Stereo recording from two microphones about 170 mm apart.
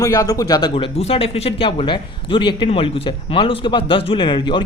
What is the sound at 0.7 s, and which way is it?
A man's voice, 35° left (ahead or behind).